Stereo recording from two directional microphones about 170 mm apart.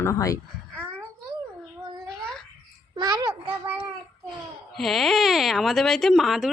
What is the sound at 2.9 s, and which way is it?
Speech, 25° right (ahead or behind).